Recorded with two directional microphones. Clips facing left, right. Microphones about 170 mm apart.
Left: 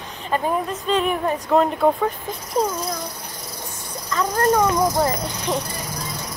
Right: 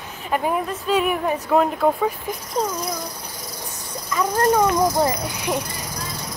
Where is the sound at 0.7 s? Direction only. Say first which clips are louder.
Even; 5° right (ahead or behind).